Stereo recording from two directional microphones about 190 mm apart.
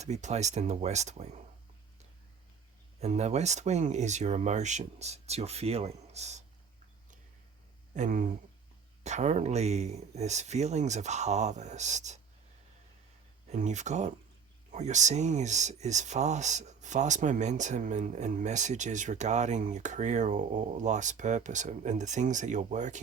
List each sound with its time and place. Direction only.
0.0 s speech: 35° right (ahead or behind)
3.0 s speech: 35° right (ahead or behind)
7.9 s speech: 40° right (ahead or behind)
13.5 s speech: 40° right (ahead or behind)